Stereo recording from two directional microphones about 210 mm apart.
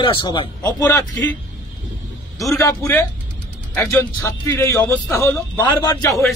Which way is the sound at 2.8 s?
10° left (ahead or behind).